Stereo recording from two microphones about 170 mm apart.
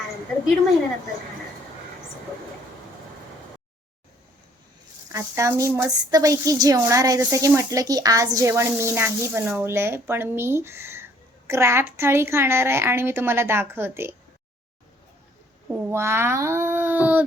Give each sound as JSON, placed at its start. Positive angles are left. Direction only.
{"t": 5.1, "sound": "a woman's voice", "side_deg": -15}
{"t": 15.7, "sound": "speech", "side_deg": -15}